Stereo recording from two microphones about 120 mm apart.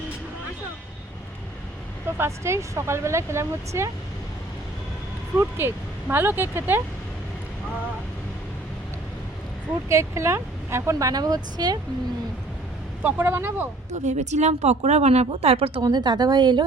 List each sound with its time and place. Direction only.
2.1 s speech: 20° right (ahead or behind)
5.4 s speech: 20° right (ahead or behind)
9.9 s speech: 25° right (ahead or behind)
13.0 s speech: 15° right (ahead or behind)
14.0 s speech: 75° right (ahead or behind); by 15.8 s 55° right (ahead or behind)
15.8 s a woman's voice: 35° right (ahead or behind)